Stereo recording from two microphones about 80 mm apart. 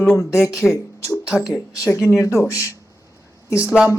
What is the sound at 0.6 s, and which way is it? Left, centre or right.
Speech, centre.